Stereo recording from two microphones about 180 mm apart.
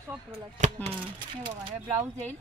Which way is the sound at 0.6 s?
40° right (ahead or behind).